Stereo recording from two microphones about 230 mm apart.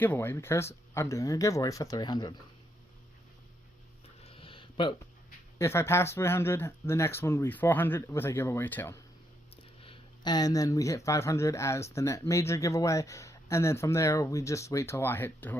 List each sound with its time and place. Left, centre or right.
0.0 s speech: centre
4.2 s a sound: left
5.5 s speech: centre
9.8 s speech: left